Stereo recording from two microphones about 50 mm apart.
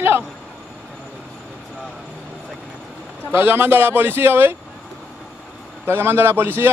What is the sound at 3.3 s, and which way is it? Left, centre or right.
Speech, right.